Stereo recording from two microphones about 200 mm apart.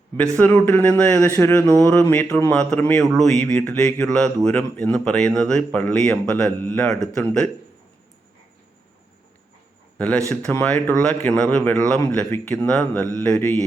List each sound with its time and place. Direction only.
0.2 s a man's voice: 5° left (ahead or behind)
10.2 s a man's voice: 10° left (ahead or behind)